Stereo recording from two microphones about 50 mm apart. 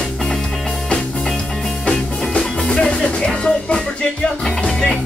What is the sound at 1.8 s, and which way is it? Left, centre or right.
Music, centre.